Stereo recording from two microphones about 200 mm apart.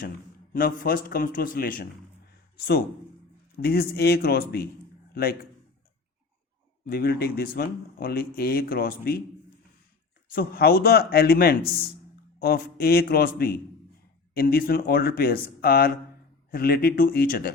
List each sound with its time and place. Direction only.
0.5 s speech: 45° left (ahead or behind)
3.6 s speech: 50° left (ahead or behind)
6.8 s speech: 50° left (ahead or behind)
10.3 s speech: 50° left (ahead or behind)